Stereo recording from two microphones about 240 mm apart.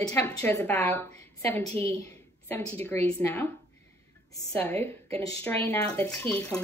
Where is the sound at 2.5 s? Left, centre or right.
Centre.